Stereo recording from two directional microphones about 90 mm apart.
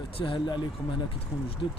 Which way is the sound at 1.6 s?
65° left (ahead or behind).